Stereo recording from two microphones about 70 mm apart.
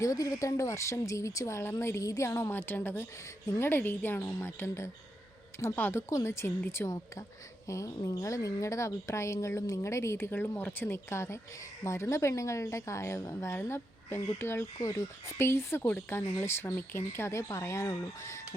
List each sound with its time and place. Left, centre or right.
0.0 s speech: left
7.7 s speech: left
14.8 s speech: left
15.4 s speech: left